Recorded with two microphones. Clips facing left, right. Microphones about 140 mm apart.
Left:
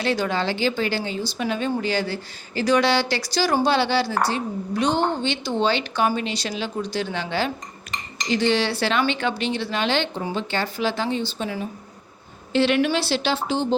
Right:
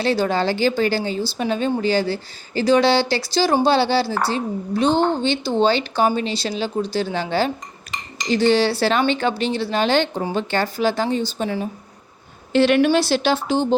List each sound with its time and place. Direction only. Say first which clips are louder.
0.0 s a woman's voice: right 4 dB; 35° right (ahead or behind)
12.5 s speech: right 4 dB; 50° right (ahead or behind)